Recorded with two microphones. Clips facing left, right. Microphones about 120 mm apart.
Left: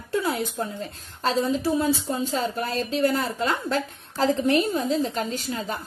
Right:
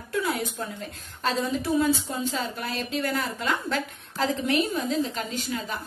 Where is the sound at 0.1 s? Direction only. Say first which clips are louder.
Left 2 dB; 30° left (ahead or behind).